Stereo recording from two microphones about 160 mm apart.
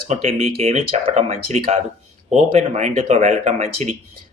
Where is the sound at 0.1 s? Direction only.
40° right (ahead or behind).